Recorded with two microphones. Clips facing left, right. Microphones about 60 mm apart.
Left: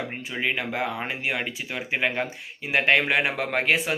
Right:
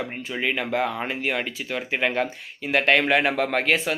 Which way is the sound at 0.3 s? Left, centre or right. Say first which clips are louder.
Right 3 dB; centre.